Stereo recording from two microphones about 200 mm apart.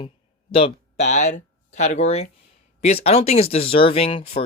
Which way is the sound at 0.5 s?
30° left (ahead or behind).